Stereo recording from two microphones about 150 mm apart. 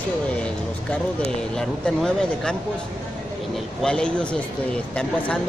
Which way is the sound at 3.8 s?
5° left (ahead or behind).